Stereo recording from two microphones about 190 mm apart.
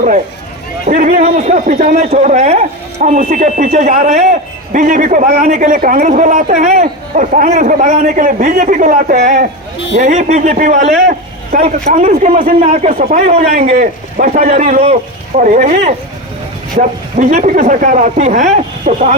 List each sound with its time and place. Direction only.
0.9 s a man's voice: 40° right (ahead or behind)
11.0 s a sound: 45° right (ahead or behind)
11.6 s a man's voice: 40° right (ahead or behind)